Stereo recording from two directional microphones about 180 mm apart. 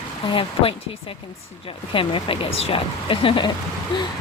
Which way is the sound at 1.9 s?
30° left (ahead or behind).